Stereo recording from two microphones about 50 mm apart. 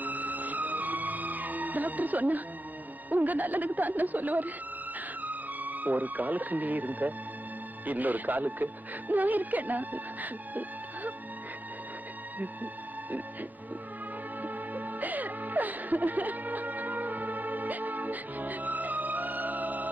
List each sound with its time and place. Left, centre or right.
0.0 s music: right
3.1 s speech: right
14.4 s music: right